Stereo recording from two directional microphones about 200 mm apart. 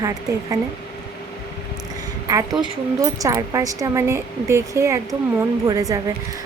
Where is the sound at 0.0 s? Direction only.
15° right (ahead or behind).